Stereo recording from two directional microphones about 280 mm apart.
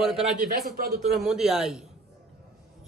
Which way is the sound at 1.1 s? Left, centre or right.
Centre.